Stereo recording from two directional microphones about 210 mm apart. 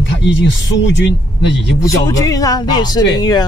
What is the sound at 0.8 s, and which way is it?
Speech, 55° left (ahead or behind).